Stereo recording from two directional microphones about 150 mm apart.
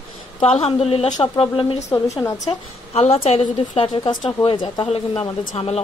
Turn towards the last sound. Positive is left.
turn(degrees=40)  # may be behind; listen again after turning